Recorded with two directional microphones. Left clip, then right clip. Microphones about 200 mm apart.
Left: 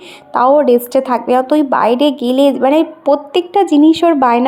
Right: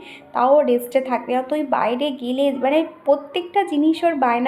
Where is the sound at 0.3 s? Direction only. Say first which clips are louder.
Left 6 dB; 40° left (ahead or behind).